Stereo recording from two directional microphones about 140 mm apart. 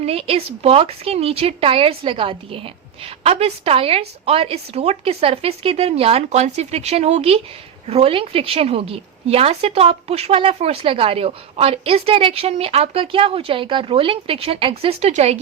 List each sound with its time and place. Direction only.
0.0 s a woman's voice: 45° right (ahead or behind)